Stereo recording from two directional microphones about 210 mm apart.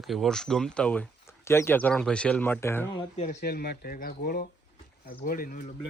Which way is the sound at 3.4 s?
50° left (ahead or behind).